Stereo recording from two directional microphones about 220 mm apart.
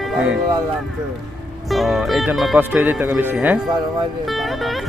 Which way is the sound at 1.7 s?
Centre (ahead or behind).